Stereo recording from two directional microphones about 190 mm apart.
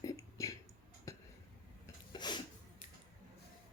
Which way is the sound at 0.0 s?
15° left (ahead or behind).